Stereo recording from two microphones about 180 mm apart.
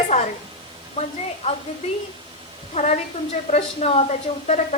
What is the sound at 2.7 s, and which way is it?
Speech, 35° left (ahead or behind).